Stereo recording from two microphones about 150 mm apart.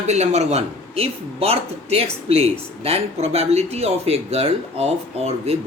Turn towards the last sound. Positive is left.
turn(degrees=-45)  # may be behind; listen again after turning